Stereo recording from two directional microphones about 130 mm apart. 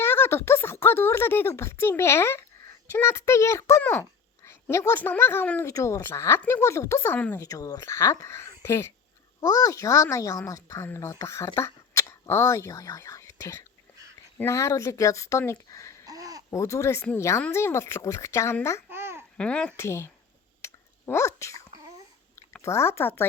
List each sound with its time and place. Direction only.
0.0 s speech: 20° left (ahead or behind)
7.3 s speech: 25° left (ahead or behind)
16.0 s a sound: 30° right (ahead or behind)
16.5 s speech: 20° left (ahead or behind)
18.9 s babbling: 15° right (ahead or behind)
19.4 s speech: 10° left (ahead or behind)
19.7 s speech: 20° left (ahead or behind)
20.6 s dog: 20° left (ahead or behind)
21.1 s speech: 20° left (ahead or behind)
22.6 s speech: 20° left (ahead or behind)